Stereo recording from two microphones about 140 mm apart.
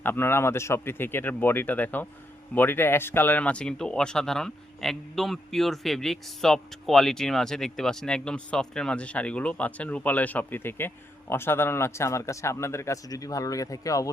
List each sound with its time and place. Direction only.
0.0 s speech: 15° left (ahead or behind)